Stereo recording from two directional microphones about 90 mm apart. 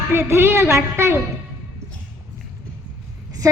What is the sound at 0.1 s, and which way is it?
A woman's voice, 30° right (ahead or behind).